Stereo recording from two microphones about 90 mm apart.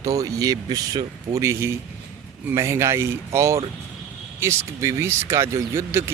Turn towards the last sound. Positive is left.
turn(degrees=-30)  # may be behind; listen again after turning